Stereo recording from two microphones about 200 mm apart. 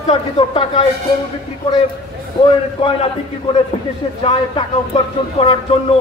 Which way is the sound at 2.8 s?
30° left (ahead or behind).